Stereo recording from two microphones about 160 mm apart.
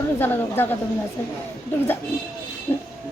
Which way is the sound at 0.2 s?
15° left (ahead or behind).